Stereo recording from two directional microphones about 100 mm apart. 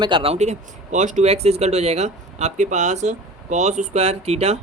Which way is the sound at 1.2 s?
90° right.